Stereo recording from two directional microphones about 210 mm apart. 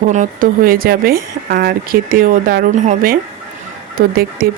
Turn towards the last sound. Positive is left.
turn(degrees=-45)  # may be behind; listen again after turning